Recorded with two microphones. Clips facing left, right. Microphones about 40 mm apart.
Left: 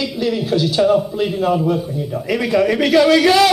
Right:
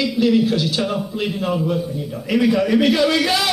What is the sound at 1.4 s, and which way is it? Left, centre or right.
Speech, centre.